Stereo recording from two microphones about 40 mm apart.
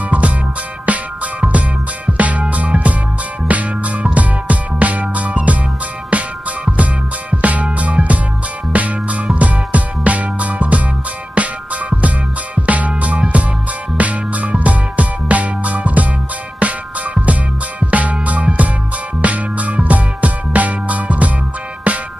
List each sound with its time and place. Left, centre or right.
0.8 s music: right